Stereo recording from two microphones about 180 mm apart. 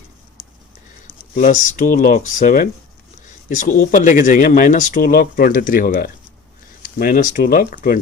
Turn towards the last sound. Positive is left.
turn(degrees=50)  # may be behind; listen again after turning